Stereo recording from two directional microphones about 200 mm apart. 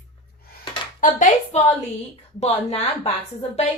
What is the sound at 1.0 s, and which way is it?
A woman's voice, 40° left (ahead or behind).